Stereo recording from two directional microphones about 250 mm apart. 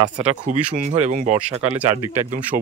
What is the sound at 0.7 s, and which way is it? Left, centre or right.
Speech, right.